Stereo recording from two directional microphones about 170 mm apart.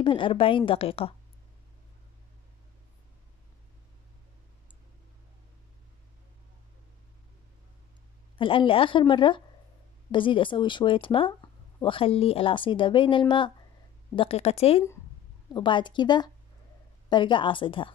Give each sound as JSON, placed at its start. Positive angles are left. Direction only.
{"t": 0.0, "sound": "a woman's voice", "side_deg": 30}
{"t": 8.4, "sound": "a woman's voice", "side_deg": 30}